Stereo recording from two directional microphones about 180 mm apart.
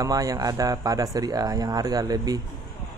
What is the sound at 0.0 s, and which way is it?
Speech, 20° right (ahead or behind).